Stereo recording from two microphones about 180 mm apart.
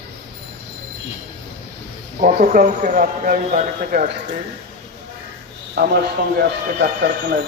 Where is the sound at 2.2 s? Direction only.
45° right (ahead or behind).